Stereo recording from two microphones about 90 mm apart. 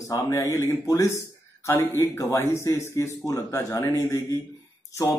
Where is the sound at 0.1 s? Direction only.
35° left (ahead or behind).